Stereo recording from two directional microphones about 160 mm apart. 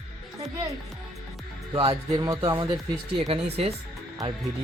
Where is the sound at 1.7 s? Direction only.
35° right (ahead or behind).